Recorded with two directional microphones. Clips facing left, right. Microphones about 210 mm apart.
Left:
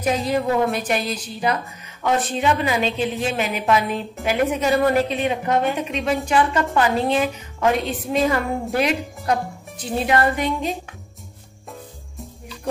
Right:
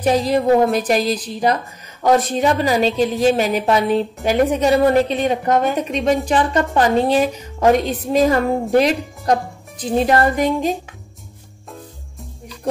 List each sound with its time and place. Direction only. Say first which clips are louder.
0.0 s a woman's voice: right 5 dB; 35° right (ahead or behind)